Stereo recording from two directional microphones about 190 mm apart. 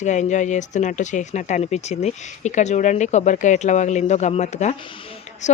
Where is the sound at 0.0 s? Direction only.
40° left (ahead or behind).